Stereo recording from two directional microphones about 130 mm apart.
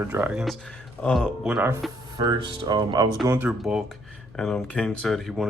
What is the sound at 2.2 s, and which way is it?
Speech, 35° right (ahead or behind).